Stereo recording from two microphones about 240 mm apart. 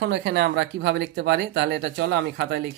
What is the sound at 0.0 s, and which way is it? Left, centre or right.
Speech, right.